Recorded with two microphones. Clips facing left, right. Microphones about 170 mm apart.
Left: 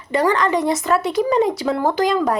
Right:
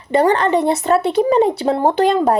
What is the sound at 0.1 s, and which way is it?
A woman's voice, 30° right (ahead or behind).